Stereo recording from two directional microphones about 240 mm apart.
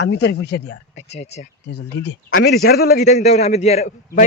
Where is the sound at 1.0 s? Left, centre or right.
Left.